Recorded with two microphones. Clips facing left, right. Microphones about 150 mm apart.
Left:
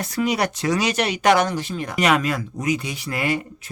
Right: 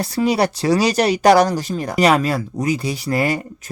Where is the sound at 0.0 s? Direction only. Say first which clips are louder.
Right 5 dB; 30° right (ahead or behind).